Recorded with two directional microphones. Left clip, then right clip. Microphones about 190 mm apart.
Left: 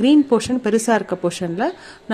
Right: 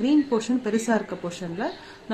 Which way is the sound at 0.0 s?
50° left (ahead or behind).